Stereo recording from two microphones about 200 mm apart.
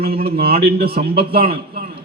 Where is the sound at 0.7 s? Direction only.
50° right (ahead or behind).